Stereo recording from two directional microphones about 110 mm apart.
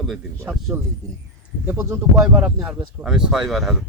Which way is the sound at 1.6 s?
25° right (ahead or behind).